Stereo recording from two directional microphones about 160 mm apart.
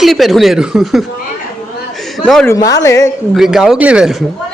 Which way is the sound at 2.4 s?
20° left (ahead or behind).